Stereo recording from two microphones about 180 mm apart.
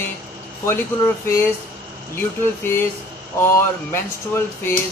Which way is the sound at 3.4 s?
15° left (ahead or behind).